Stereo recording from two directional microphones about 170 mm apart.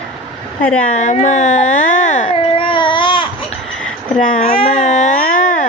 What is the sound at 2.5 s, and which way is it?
Baby cry, 30° left (ahead or behind).